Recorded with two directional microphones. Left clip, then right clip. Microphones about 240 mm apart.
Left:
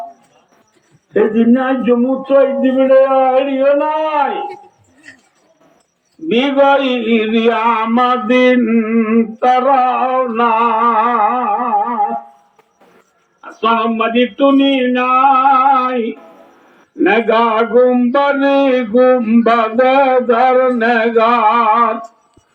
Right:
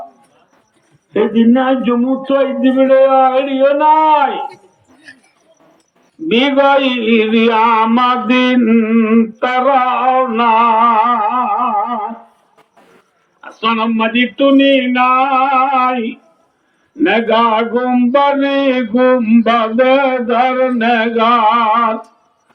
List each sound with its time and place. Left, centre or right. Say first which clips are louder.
1.1 s music: even; right
6.2 s music: even; right
13.4 s music: left 2 dB; right
17.0 s music: even; right